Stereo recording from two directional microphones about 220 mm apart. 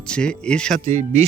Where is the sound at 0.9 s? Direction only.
35° right (ahead or behind).